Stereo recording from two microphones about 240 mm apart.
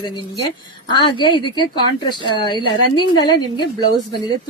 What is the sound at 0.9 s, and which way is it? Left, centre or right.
Speech, centre.